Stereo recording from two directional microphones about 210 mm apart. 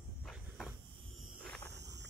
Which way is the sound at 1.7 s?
55° right (ahead or behind).